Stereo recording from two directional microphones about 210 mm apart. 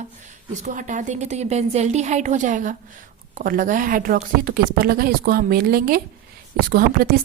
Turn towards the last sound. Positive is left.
turn(degrees=-45)  # may be behind; listen again after turning